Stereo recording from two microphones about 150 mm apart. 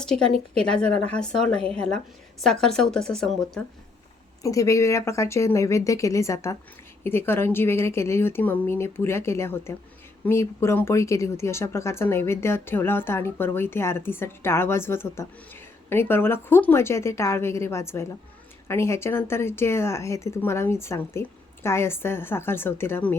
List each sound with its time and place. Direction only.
0.0 s a woman's voice: 5° left (ahead or behind)
4.4 s speech: 20° left (ahead or behind)